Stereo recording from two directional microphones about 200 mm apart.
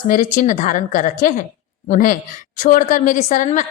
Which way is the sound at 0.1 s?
40° left (ahead or behind).